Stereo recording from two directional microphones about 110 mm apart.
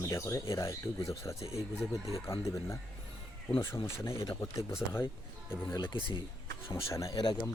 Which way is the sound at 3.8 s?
25° left (ahead or behind).